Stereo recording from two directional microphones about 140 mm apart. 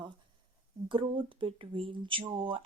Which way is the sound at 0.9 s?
35° right (ahead or behind).